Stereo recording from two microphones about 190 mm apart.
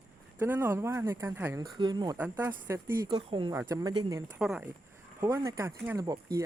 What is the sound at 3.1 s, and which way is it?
Speech, 25° right (ahead or behind).